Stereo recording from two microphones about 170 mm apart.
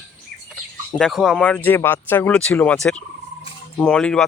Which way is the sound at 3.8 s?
5° left (ahead or behind).